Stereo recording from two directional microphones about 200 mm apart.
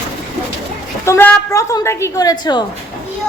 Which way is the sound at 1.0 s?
15° left (ahead or behind).